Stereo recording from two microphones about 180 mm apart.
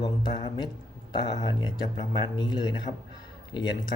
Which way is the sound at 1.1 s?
25° left (ahead or behind).